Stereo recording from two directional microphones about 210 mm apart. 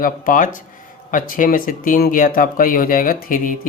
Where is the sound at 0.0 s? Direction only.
40° left (ahead or behind).